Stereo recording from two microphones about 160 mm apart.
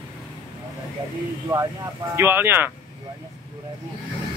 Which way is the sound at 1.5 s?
30° right (ahead or behind).